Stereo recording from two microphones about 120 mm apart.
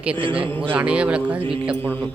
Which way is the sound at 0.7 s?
10° right (ahead or behind).